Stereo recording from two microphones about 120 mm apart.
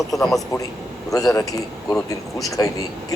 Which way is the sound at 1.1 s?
30° left (ahead or behind).